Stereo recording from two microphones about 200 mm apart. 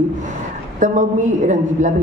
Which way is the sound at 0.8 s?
40° right (ahead or behind).